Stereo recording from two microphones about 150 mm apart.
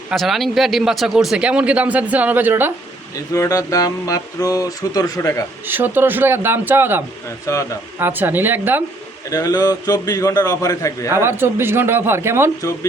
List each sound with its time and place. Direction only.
0.1 s speech: centre (ahead or behind)
3.2 s mantra: 20° left (ahead or behind)
5.6 s speech: 15° right (ahead or behind)
7.4 s mantra: 20° left (ahead or behind)
7.9 s speech: 15° right (ahead or behind)
9.3 s mantra: 25° left (ahead or behind)
11.1 s speech: 15° right (ahead or behind)